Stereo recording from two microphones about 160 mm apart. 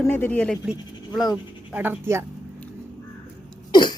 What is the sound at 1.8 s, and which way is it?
Speech, 15° right (ahead or behind).